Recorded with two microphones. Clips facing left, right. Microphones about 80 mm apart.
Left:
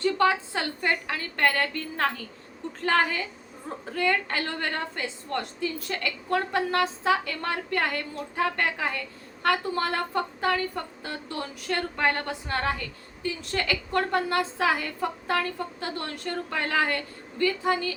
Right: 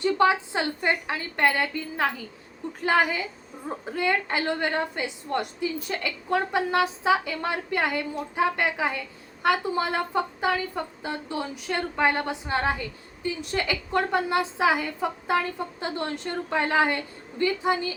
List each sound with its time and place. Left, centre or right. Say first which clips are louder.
0.0 s a woman's voice: right 2 dB; centre